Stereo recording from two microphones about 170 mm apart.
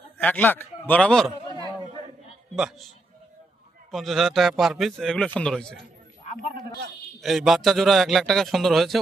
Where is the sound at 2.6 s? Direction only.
Centre (ahead or behind).